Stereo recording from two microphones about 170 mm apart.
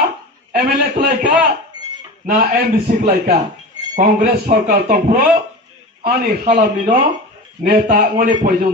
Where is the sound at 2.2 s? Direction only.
70° right (ahead or behind).